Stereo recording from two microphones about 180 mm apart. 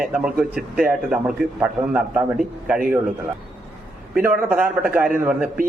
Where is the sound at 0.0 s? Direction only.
5° right (ahead or behind).